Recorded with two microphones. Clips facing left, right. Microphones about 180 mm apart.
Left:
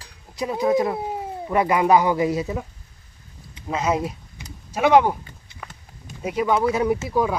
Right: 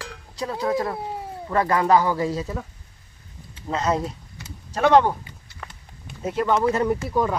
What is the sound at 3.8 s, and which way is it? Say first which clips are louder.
Speech: left 1 dB; 15° left (ahead or behind).